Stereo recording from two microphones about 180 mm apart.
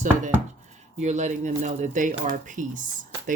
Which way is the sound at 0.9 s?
40° right (ahead or behind).